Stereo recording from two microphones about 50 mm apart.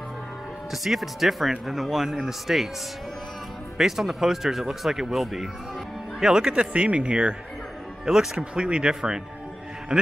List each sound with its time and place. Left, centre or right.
0.7 s speech: centre
3.7 s speech: centre
6.5 s speech: right
8.0 s speech: centre